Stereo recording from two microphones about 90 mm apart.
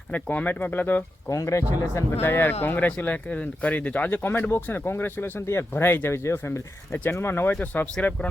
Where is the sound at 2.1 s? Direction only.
25° left (ahead or behind).